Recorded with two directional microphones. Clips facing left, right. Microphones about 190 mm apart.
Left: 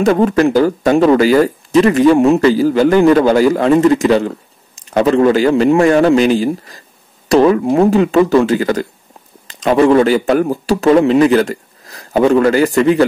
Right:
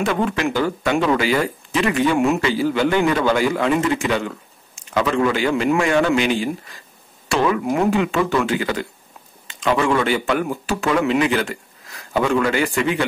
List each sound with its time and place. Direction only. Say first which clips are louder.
0.0 s speech: left 9 dB; 40° left (ahead or behind)